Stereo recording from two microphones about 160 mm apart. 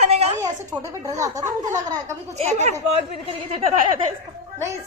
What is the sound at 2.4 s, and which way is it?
Speech, 45° right (ahead or behind).